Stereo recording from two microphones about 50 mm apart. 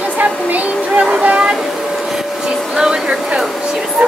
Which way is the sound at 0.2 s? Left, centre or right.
Right.